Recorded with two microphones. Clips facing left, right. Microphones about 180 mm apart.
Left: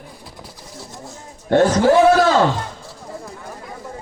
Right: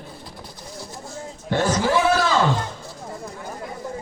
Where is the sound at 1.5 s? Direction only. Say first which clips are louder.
Left 7 dB; 55° left (ahead or behind).